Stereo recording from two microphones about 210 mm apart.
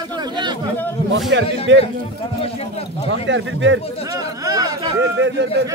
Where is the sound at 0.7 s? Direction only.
10° left (ahead or behind).